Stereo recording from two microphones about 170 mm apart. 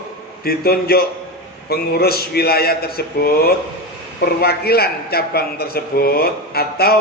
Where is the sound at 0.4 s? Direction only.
65° left (ahead or behind).